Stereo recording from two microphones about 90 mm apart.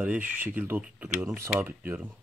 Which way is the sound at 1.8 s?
15° right (ahead or behind).